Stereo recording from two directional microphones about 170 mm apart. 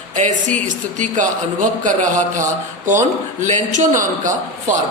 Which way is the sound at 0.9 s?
45° right (ahead or behind).